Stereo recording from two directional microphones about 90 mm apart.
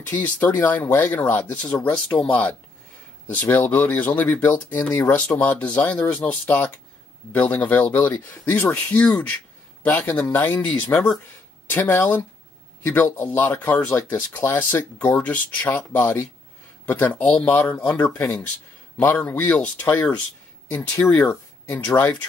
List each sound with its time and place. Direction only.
0.1 s speech: 20° left (ahead or behind)